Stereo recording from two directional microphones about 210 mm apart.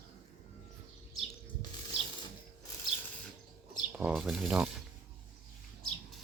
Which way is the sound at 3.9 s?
5° right (ahead or behind).